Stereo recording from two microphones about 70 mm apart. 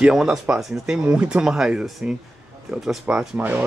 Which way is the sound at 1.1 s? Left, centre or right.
Centre.